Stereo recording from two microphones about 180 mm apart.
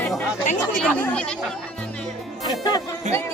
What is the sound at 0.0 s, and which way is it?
Chatter, 5° left (ahead or behind).